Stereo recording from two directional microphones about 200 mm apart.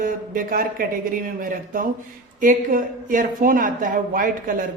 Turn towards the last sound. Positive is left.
turn(degrees=-40)  # may be behind; listen again after turning